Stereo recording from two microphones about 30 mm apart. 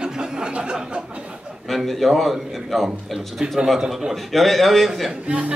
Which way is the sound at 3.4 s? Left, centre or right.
Right.